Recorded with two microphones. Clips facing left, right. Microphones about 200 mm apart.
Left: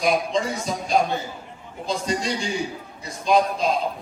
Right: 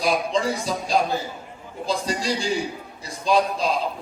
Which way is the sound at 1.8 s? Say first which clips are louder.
Even; 30° right (ahead or behind).